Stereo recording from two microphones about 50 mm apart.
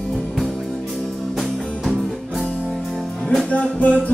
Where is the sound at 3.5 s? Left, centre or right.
Left.